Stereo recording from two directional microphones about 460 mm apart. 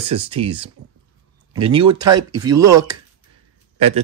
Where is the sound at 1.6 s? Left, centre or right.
Right.